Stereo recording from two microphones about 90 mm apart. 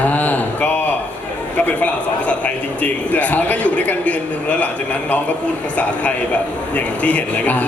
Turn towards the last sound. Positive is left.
turn(degrees=15)  # may be behind; listen again after turning